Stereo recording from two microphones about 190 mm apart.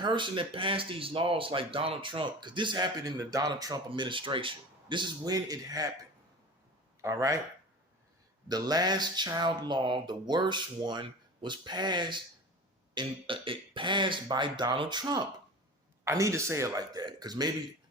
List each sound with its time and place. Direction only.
0.0 s speech: 25° right (ahead or behind)
7.0 s speech: 15° right (ahead or behind)
8.4 s speech: 20° right (ahead or behind)